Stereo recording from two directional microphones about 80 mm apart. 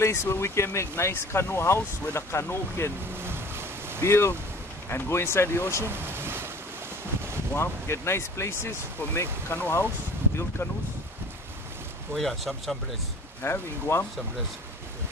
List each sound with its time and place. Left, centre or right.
0.0 s speech: left
3.2 s boat: right
4.0 s speech: left
5.9 s boat: right
7.5 s speech: left
12.2 s speech: centre
13.4 s speech: left